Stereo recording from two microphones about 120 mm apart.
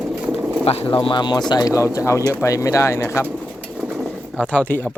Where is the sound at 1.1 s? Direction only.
40° left (ahead or behind).